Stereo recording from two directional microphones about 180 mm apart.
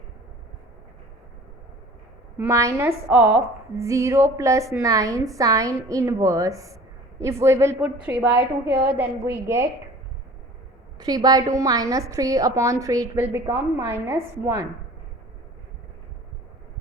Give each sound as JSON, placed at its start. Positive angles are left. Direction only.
{"t": 2.4, "sound": "a woman's voice", "side_deg": -15}
{"t": 11.0, "sound": "a woman's voice", "side_deg": -20}